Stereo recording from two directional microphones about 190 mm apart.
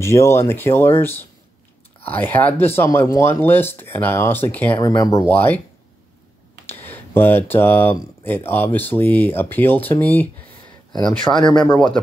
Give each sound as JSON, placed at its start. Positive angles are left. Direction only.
{"t": 0.0, "sound": "speech", "side_deg": 15}
{"t": 4.7, "sound": "speech", "side_deg": 20}
{"t": 6.7, "sound": "speech", "side_deg": 10}